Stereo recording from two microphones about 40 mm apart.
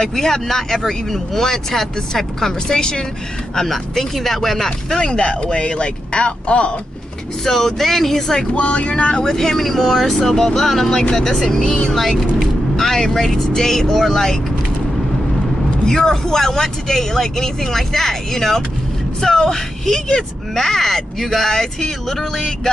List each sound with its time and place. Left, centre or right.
0.0 s speech: centre
3.5 s speech: centre
5.0 s speech: left
7.4 s speech: centre
8.4 s speech: left
9.2 s speech: centre
15.8 s speech: centre